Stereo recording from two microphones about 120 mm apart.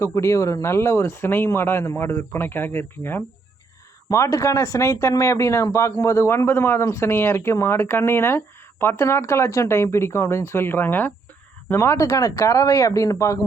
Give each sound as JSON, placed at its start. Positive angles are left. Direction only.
{"t": 0.0, "sound": "speech", "side_deg": 25}